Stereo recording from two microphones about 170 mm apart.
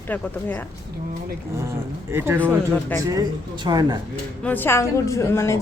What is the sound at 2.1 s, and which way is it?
Speech, 15° right (ahead or behind).